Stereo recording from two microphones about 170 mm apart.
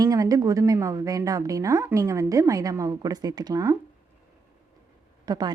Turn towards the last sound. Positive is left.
turn(degrees=-25)  # may be behind; listen again after turning